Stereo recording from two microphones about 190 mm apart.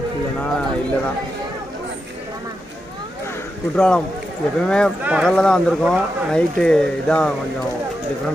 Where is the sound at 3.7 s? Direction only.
5° left (ahead or behind).